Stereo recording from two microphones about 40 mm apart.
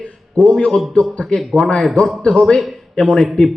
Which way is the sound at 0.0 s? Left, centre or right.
Left.